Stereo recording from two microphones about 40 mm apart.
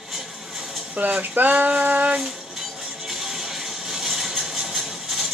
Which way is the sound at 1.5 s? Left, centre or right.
Right.